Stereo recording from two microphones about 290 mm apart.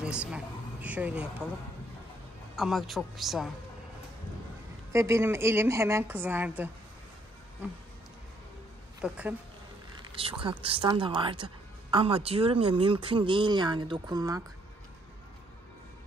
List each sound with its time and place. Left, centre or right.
0.0 s speech: centre
2.5 s speech: centre
4.9 s a woman's voice: centre
9.0 s speech: centre
10.4 s a woman's voice: centre